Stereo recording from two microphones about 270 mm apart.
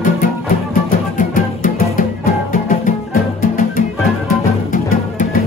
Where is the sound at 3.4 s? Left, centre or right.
Left.